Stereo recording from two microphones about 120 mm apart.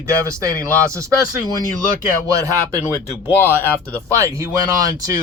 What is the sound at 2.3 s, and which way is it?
Speech, 30° right (ahead or behind).